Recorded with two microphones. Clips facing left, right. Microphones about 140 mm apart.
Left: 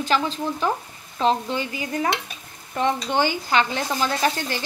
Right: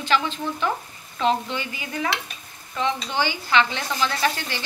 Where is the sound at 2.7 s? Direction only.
50° left (ahead or behind).